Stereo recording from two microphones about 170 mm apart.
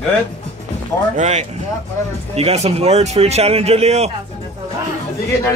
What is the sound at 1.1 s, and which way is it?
A man's voice, 40° right (ahead or behind).